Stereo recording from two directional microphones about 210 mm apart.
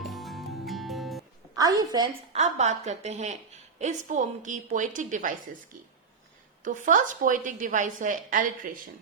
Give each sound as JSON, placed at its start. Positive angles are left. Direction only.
{"t": 0.0, "sound": "music", "side_deg": 0}
{"t": 1.5, "sound": "a woman's voice", "side_deg": -15}
{"t": 2.3, "sound": "a woman's voice", "side_deg": -35}
{"t": 6.7, "sound": "a woman's voice", "side_deg": -40}